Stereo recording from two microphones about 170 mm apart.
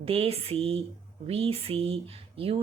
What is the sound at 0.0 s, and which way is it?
A woman's voice, 35° right (ahead or behind).